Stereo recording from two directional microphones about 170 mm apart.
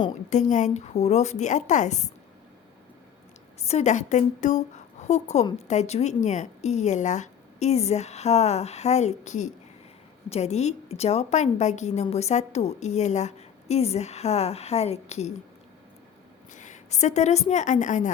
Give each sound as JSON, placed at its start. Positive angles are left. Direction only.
{"t": 0.3, "sound": "a woman's voice", "side_deg": 45}
{"t": 3.6, "sound": "a woman's voice", "side_deg": 40}
{"t": 16.6, "sound": "a woman's voice", "side_deg": 45}